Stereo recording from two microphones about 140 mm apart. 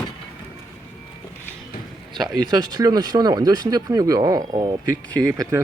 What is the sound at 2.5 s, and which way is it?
Speech, 30° right (ahead or behind).